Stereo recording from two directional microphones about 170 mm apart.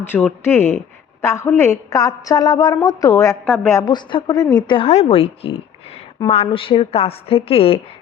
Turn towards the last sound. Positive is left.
turn(degrees=35)  # may be behind; listen again after turning